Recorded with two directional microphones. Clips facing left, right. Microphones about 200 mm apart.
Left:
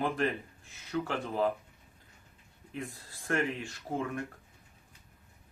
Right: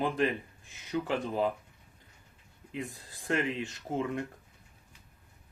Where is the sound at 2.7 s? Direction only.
15° right (ahead or behind).